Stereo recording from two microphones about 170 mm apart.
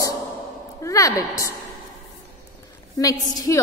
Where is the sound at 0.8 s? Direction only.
20° left (ahead or behind).